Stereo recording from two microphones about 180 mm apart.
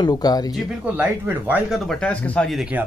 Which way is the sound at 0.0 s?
20° left (ahead or behind).